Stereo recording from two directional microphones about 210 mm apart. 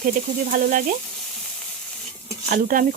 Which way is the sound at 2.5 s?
40° right (ahead or behind).